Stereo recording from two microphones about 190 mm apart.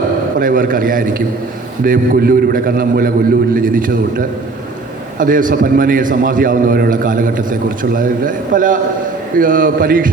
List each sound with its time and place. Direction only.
0.3 s a man's voice: 45° right (ahead or behind)
5.2 s a man's voice: 45° right (ahead or behind)